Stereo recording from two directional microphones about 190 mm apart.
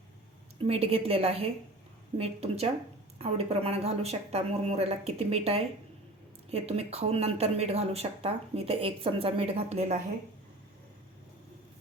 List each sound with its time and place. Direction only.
0.6 s speech: 30° right (ahead or behind)